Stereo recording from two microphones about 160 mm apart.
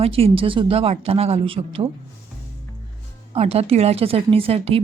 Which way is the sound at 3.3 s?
40° right (ahead or behind).